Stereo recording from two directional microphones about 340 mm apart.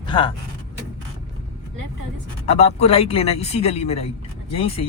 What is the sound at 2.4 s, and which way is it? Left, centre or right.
Speech, centre.